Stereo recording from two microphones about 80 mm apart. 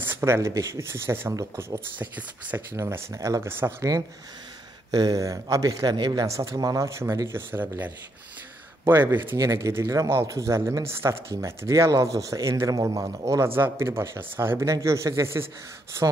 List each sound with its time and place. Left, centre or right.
0.0 s speech: right
2.7 s speech: right
4.9 s speech: right
5.9 s speech: right
6.2 s speech: right
7.3 s speech: right
8.8 s speech: right
9.4 s speech: right